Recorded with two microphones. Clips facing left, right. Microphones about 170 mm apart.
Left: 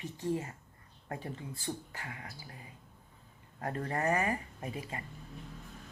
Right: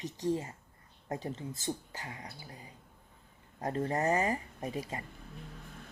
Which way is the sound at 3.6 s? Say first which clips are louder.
Right 2 dB; 25° right (ahead or behind).